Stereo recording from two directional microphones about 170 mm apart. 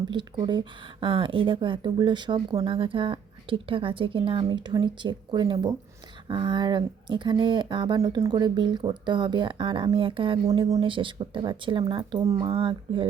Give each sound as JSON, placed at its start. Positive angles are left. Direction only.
{"t": 0.1, "sound": "speech", "side_deg": -25}